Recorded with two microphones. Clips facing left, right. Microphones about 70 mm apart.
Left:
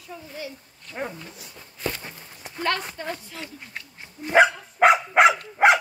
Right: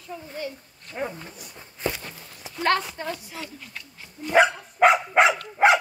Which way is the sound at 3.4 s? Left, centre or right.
Left.